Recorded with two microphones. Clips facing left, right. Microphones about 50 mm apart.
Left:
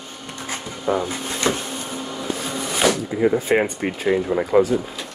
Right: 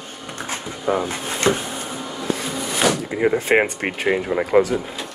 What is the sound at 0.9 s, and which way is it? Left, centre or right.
Speech, centre.